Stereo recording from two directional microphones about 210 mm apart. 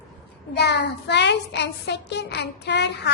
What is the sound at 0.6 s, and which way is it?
Child singing, 50° left (ahead or behind).